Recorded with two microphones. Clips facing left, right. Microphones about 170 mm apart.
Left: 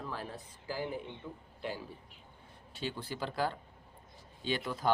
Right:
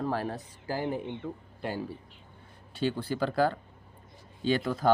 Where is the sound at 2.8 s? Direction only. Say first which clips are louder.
Right 9 dB; 65° right (ahead or behind).